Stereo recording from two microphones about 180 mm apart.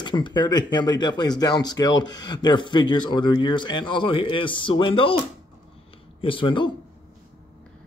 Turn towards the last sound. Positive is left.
turn(degrees=25)  # may be behind; listen again after turning